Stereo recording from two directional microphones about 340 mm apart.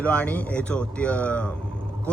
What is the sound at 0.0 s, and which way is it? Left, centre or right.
Speech, centre.